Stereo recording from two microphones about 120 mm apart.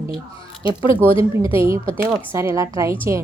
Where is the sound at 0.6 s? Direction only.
50° left (ahead or behind).